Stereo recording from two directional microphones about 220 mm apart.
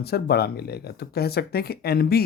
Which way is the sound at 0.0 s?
45° left (ahead or behind).